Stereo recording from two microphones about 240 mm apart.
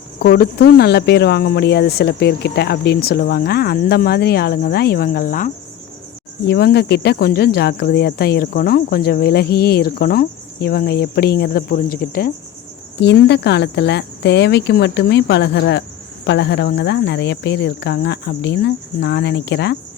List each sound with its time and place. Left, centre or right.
0.2 s speech: left
6.5 s speech: left